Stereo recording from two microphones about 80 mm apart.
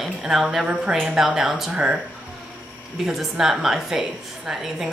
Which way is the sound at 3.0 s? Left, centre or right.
Centre.